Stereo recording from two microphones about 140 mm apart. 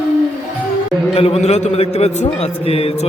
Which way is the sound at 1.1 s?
45° left (ahead or behind).